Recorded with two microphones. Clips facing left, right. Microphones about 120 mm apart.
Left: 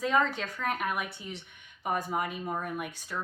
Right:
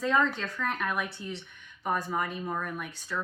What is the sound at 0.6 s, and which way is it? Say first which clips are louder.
Speech: even; 10° left (ahead or behind).